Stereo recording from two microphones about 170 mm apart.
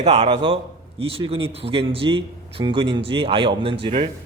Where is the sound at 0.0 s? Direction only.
40° right (ahead or behind).